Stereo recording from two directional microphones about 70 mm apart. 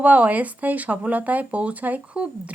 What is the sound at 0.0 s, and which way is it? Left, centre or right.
Speech, right.